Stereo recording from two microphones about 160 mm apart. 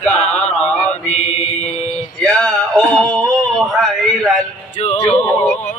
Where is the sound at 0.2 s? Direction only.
45° left (ahead or behind).